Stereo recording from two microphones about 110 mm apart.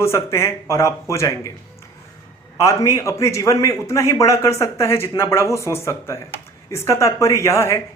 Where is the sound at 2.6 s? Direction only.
25° left (ahead or behind).